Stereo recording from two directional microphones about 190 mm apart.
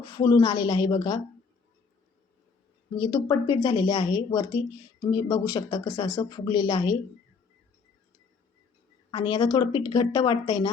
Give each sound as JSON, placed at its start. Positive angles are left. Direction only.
{"t": 0.1, "sound": "speech", "side_deg": 20}
{"t": 2.9, "sound": "speech", "side_deg": 20}
{"t": 9.0, "sound": "speech", "side_deg": 20}